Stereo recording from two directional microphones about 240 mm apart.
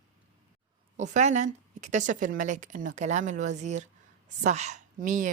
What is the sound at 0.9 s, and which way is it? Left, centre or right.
A woman's voice, right.